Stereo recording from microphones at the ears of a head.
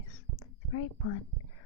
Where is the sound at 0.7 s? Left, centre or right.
Left.